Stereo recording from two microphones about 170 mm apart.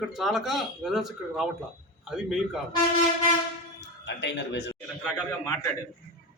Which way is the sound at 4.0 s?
90° left.